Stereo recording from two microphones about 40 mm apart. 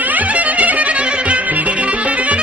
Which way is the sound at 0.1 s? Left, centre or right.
Right.